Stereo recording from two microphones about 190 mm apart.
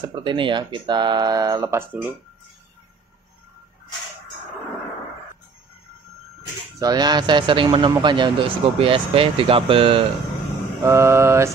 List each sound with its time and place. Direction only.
0.0 s speech: 25° right (ahead or behind)
6.8 s speech: 20° right (ahead or behind)
10.8 s mantra: 15° right (ahead or behind)